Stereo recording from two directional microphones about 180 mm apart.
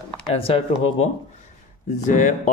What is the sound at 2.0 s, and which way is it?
Speech, 45° left (ahead or behind).